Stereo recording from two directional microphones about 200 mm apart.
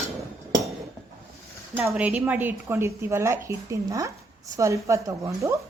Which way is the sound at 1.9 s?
5° right (ahead or behind).